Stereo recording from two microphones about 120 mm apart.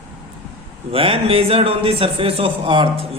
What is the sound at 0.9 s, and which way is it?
A man's voice, 50° right (ahead or behind).